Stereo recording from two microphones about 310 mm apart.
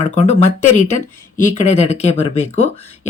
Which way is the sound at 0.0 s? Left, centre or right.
Centre.